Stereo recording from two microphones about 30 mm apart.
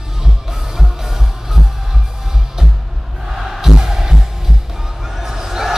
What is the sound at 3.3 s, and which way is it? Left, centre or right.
Music, centre.